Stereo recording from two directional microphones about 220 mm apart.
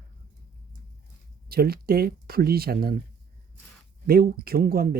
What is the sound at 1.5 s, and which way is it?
Speech, 45° right (ahead or behind).